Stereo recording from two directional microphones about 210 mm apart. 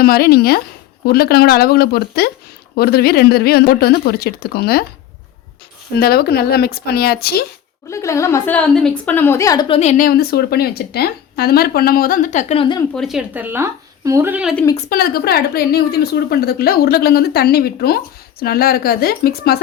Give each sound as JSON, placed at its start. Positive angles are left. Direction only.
{"t": 0.0, "sound": "speech", "side_deg": 45}
{"t": 6.0, "sound": "speech", "side_deg": 45}
{"t": 7.9, "sound": "a woman's voice", "side_deg": 15}
{"t": 10.0, "sound": "speech", "side_deg": 45}
{"t": 12.9, "sound": "speech", "side_deg": 0}
{"t": 14.5, "sound": "a woman's voice", "side_deg": 15}
{"t": 14.8, "sound": "speech", "side_deg": 45}